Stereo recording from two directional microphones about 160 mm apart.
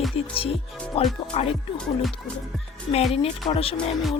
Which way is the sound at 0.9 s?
35° left (ahead or behind).